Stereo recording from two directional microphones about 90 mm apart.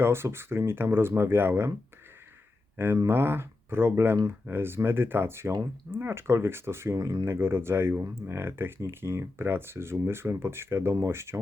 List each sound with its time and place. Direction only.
0.0 s speech: 30° right (ahead or behind)
2.7 s speech: 25° right (ahead or behind)